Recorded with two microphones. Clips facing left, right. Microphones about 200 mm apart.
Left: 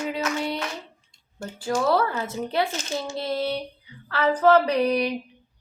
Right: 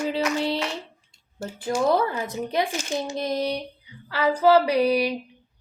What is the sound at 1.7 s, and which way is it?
A woman's voice, 15° right (ahead or behind).